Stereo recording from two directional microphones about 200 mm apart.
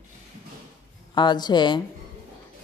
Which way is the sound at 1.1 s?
20° left (ahead or behind).